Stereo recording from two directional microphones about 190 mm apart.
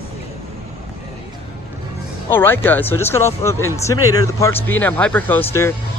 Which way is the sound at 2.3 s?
10° left (ahead or behind).